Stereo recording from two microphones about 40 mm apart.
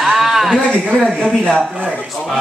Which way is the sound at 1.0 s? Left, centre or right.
Left.